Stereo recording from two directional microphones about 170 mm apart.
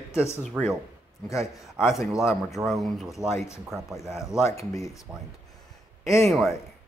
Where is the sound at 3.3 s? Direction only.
15° left (ahead or behind).